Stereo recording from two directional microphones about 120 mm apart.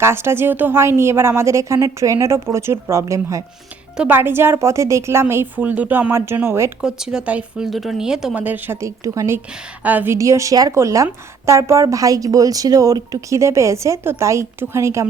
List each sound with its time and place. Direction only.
0.0 s a woman's voice: 20° right (ahead or behind)
3.9 s a woman's voice: 15° right (ahead or behind)
6.8 s speech: 5° right (ahead or behind); by 9.4 s 25° right (ahead or behind)
9.8 s a woman's voice: 15° right (ahead or behind)